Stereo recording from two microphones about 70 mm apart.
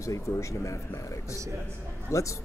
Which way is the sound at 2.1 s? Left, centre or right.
Left.